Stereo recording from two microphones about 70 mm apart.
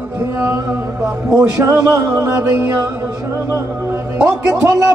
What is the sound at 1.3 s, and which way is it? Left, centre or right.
Speech, right.